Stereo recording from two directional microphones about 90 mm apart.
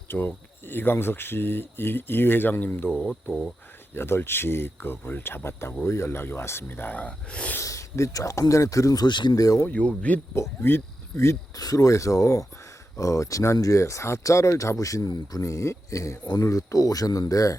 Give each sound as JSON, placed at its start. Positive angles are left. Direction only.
{"t": 0.1, "sound": "speech", "side_deg": 25}
{"t": 2.9, "sound": "speech", "side_deg": 5}
{"t": 3.9, "sound": "speech", "side_deg": 25}
{"t": 7.6, "sound": "speech", "side_deg": 35}
{"t": 9.0, "sound": "speech", "side_deg": 55}
{"t": 9.4, "sound": "speech", "side_deg": 40}
{"t": 9.6, "sound": "speech", "side_deg": 15}
{"t": 10.3, "sound": "speech", "side_deg": 30}
{"t": 11.2, "sound": "speech", "side_deg": 35}
{"t": 15.0, "sound": "speech", "side_deg": 50}
{"t": 15.4, "sound": "speech", "side_deg": 35}